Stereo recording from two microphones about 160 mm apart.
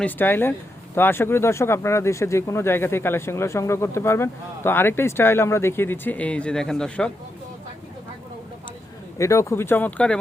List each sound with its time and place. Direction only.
0.0 s speech: 10° left (ahead or behind)
9.1 s speech: 20° left (ahead or behind)